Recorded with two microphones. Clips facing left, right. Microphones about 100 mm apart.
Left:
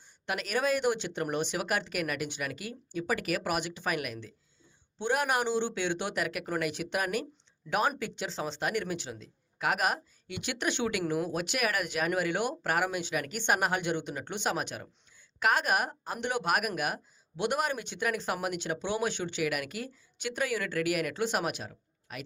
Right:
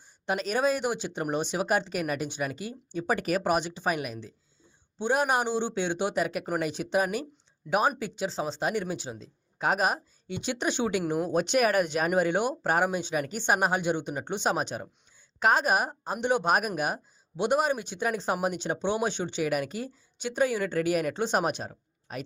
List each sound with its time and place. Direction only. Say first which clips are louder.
0.3 s a man's voice: right 3 dB; 30° right (ahead or behind)
11.3 s speech: right 7 dB; 30° right (ahead or behind)